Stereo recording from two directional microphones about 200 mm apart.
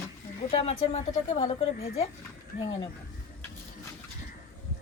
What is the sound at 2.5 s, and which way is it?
Speech, 50° left (ahead or behind).